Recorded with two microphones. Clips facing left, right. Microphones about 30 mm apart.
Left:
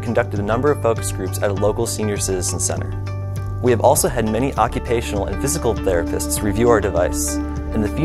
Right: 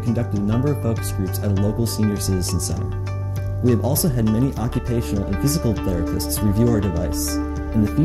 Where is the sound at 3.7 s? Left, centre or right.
Left.